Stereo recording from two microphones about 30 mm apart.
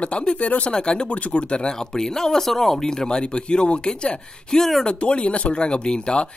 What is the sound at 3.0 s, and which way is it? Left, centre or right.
Speech, left.